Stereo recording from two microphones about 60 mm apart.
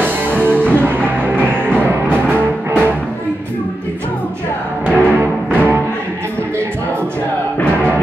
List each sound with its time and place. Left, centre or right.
0.0 s music: right
4.8 s music: right